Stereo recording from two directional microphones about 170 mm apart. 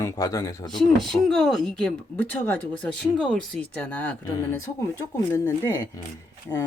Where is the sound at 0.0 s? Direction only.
20° left (ahead or behind).